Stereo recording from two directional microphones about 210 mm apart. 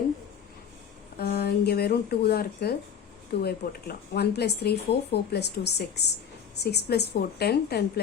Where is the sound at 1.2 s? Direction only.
50° left (ahead or behind).